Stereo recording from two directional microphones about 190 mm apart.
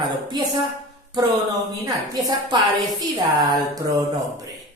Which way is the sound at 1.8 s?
20° right (ahead or behind).